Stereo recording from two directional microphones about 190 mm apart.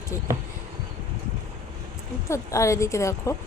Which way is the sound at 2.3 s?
15° left (ahead or behind).